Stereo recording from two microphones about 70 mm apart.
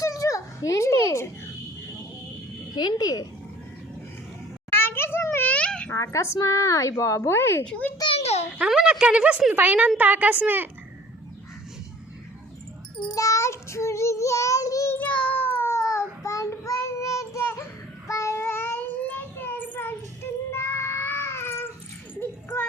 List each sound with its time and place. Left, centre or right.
0.0 s a sound: left
2.7 s speech: left
4.7 s a sound: left
5.5 s babbling: centre
5.9 s a woman's voice: left
7.6 s a child's voice: centre
8.6 s a woman's voice: centre; by 10.7 s right
13.1 s child singing: left
14.8 s child singing: left
20.2 s cat: left
22.2 s a sound: left